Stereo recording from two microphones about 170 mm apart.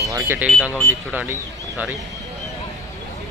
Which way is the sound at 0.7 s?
15° left (ahead or behind).